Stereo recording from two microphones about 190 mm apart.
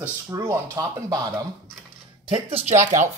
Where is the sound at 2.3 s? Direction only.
30° right (ahead or behind).